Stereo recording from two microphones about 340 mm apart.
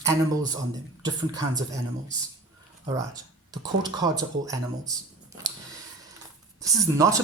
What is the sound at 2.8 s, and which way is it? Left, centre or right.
Speech, centre.